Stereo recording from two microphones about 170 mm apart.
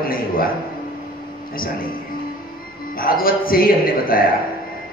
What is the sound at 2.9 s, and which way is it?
A man's voice, 60° left (ahead or behind).